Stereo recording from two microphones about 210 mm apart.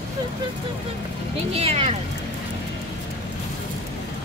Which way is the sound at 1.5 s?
30° right (ahead or behind).